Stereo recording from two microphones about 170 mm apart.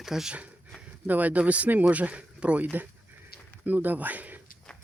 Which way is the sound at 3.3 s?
65° left (ahead or behind).